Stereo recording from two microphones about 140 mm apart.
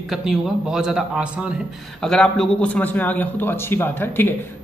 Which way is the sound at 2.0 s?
5° left (ahead or behind).